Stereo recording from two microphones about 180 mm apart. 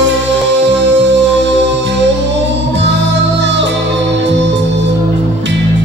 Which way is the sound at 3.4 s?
80° right.